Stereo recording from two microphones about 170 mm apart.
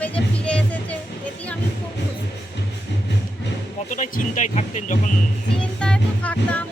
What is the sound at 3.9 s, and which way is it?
Speech, 45° left (ahead or behind).